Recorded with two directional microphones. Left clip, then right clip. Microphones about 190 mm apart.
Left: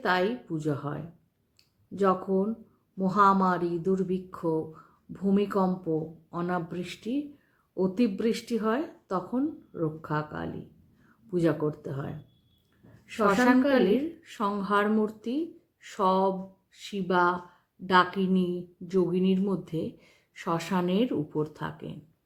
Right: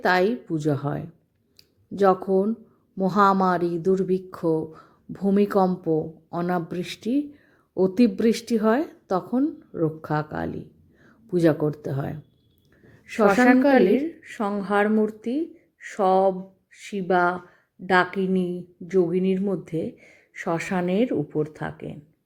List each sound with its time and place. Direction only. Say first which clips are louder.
0.0 s speech: right 6 dB; 35° right (ahead or behind)
13.7 s a woman's voice: right 5 dB; 20° right (ahead or behind)